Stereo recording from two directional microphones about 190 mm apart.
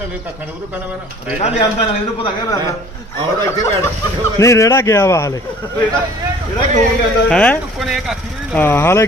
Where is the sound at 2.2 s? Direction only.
15° left (ahead or behind).